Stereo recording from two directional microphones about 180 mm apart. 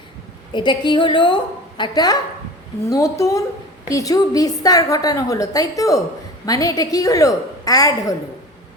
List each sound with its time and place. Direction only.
0.5 s a woman's voice: 25° left (ahead or behind)